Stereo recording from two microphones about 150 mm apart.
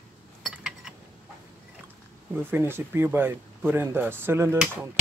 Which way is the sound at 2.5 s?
15° right (ahead or behind).